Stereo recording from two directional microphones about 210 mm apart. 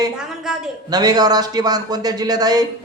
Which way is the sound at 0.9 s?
20° right (ahead or behind).